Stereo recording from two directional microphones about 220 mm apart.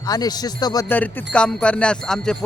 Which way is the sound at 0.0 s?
15° left (ahead or behind).